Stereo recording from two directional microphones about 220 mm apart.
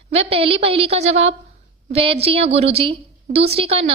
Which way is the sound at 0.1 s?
25° right (ahead or behind).